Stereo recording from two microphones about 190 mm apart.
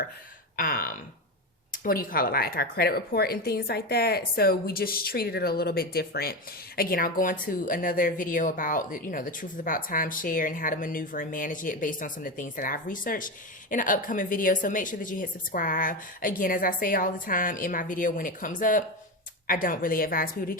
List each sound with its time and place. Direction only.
0.5 s a woman's voice: 50° left (ahead or behind)